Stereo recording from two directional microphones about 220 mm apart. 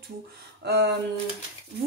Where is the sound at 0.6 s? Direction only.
50° right (ahead or behind).